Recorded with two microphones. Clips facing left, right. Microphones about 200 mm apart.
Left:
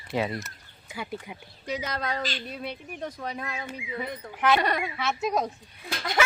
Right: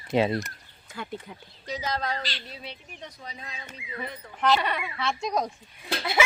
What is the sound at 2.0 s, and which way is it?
Speech, 50° left (ahead or behind).